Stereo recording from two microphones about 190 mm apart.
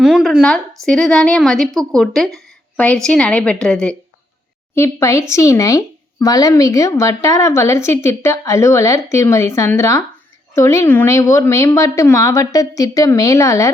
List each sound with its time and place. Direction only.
0.0 s a woman's voice: centre (ahead or behind); by 13.7 s 15° left (ahead or behind)